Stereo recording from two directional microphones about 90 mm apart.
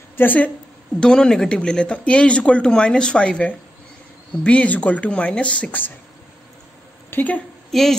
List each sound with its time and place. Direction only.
0.2 s a woman's voice: 20° left (ahead or behind)
0.9 s speech: 10° left (ahead or behind)
7.1 s a woman's voice: 20° left (ahead or behind)
7.7 s a woman's voice: 5° left (ahead or behind)